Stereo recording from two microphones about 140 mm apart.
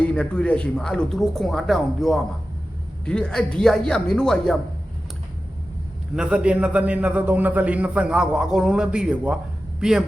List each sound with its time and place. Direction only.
0.0 s speech: 10° left (ahead or behind)
6.1 s a man's voice: 5° right (ahead or behind)